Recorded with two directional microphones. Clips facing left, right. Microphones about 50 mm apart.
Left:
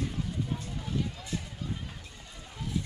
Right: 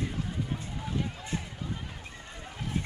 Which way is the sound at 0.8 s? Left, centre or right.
Right.